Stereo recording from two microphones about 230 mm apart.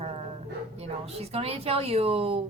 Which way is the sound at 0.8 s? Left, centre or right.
Right.